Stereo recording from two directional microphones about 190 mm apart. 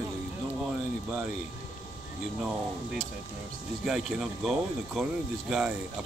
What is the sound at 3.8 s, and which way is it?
Speech, 5° right (ahead or behind).